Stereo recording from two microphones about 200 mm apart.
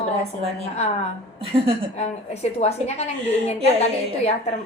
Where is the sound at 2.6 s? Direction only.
30° left (ahead or behind).